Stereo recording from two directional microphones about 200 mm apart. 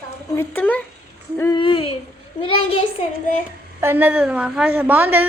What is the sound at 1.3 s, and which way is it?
Speech, 20° left (ahead or behind).